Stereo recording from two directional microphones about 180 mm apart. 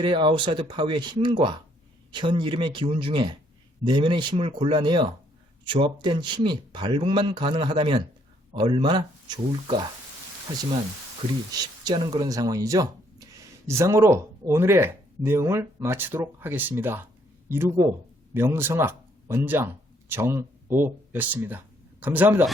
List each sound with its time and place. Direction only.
0.0 s speech: 25° right (ahead or behind)
11.9 s speech: 25° right (ahead or behind)